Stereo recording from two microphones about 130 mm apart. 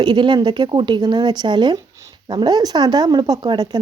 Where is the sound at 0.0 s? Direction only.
35° right (ahead or behind).